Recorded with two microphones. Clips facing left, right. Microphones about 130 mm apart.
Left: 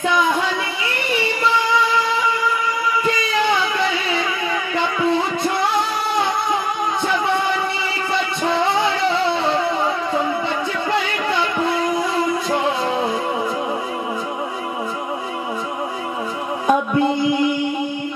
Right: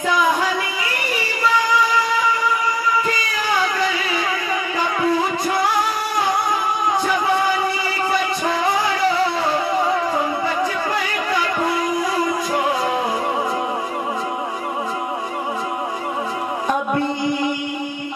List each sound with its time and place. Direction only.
3.4 s a sound: 25° left (ahead or behind)
4.7 s music: 25° left (ahead or behind)
8.1 s music: 25° left (ahead or behind)